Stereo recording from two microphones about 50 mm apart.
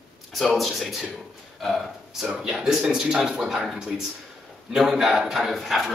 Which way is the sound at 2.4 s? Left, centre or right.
Centre.